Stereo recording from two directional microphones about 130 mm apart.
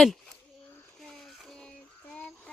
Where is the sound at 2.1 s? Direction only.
5° left (ahead or behind).